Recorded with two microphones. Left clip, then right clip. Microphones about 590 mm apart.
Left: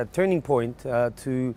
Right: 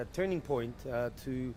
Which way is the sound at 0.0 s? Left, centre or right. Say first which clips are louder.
Left 11 dB; left.